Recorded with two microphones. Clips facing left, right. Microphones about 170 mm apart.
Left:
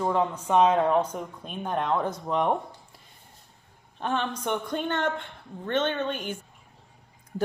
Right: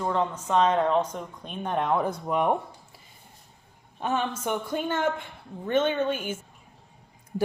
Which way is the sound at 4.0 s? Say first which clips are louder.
Right 1 dB; 5° right (ahead or behind).